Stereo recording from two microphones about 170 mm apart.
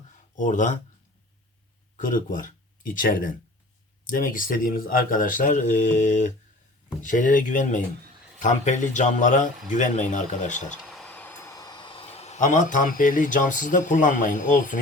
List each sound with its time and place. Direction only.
0.3 s a man's voice: 50° left (ahead or behind)
2.0 s a man's voice: 50° left (ahead or behind)
10.8 s speech: centre (ahead or behind); by 14.8 s 50° left (ahead or behind)